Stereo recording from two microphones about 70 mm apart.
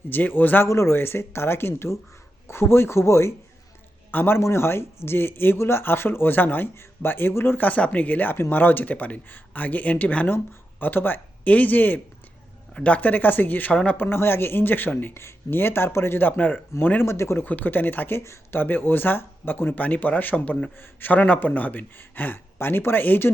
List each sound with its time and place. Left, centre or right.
0.1 s speech: left
0.7 s speech: left
4.1 s speech: left
4.4 s speech: left
17.4 s speech: left
18.2 s speech: left
18.6 s speech: left